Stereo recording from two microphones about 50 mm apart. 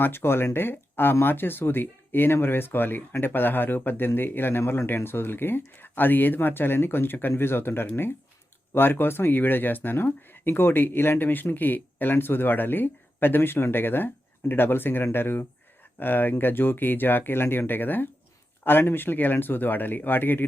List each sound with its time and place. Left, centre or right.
0.0 s speech: left
4.6 s a man's voice: left
4.9 s speech: left